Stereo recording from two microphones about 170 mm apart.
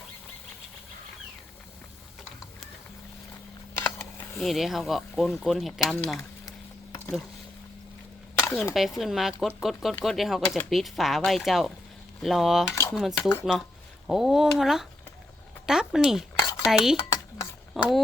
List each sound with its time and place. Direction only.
3.8 s a sound: 15° left (ahead or behind)
4.4 s speech: centre (ahead or behind)
8.7 s speech: centre (ahead or behind)
12.6 s dishes: 15° left (ahead or behind)
12.9 s speech: centre (ahead or behind)
16.4 s dishes: 25° left (ahead or behind)
16.6 s speech: centre (ahead or behind)